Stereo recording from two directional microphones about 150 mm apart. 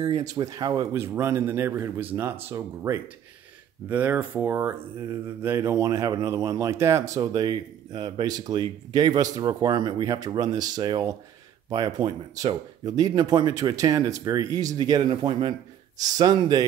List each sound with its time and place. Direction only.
0.0 s speech: 25° right (ahead or behind)